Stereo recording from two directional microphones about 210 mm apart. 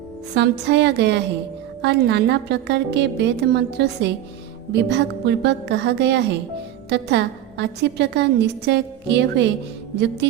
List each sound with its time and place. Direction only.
0.3 s a woman's voice: 55° right (ahead or behind)